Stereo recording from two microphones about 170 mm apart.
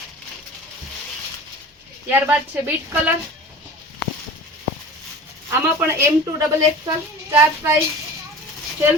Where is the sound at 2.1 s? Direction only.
10° right (ahead or behind).